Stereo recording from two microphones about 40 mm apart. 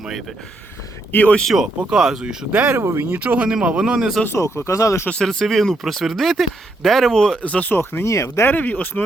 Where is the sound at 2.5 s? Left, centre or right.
Right.